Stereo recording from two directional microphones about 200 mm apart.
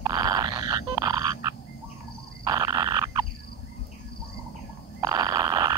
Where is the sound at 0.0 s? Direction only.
20° right (ahead or behind).